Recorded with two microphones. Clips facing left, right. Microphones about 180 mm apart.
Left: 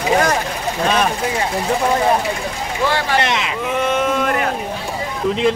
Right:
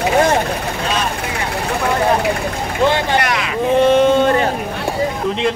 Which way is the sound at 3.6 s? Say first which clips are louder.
Right 9 dB; 30° right (ahead or behind).